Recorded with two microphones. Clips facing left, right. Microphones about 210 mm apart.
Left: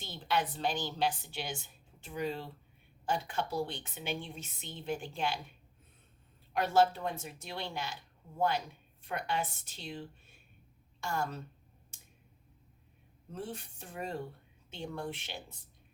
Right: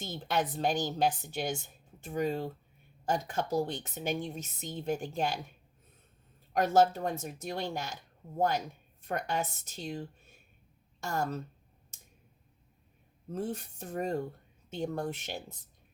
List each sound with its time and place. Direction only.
0.0 s a woman's voice: 45° right (ahead or behind)
6.7 s a woman's voice: 45° right (ahead or behind)
13.3 s a woman's voice: 45° right (ahead or behind)